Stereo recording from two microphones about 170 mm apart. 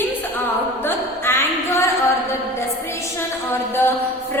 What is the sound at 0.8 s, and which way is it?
A woman's voice, 15° left (ahead or behind).